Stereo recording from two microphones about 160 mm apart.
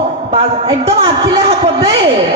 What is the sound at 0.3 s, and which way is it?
A man's voice, 35° right (ahead or behind).